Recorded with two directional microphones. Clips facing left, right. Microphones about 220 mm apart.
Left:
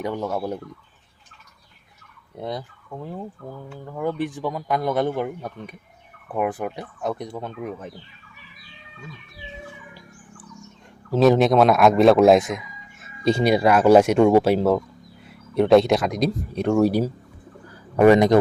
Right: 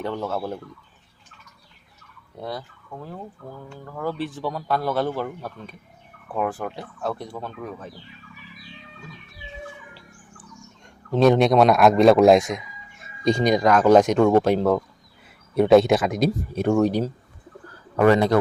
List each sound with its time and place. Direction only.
0.0 s speech: 15° left (ahead or behind)
2.4 s speech: 20° left (ahead or behind)
11.1 s speech: centre (ahead or behind)
16.8 s speech: 10° left (ahead or behind)
17.7 s bird: 15° left (ahead or behind)